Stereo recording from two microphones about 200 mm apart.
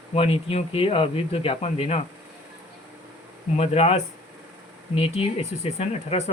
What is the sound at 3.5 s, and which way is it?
Speech, 30° left (ahead or behind).